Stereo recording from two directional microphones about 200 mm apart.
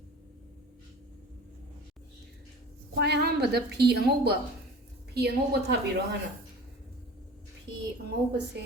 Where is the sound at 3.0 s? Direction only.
55° right (ahead or behind).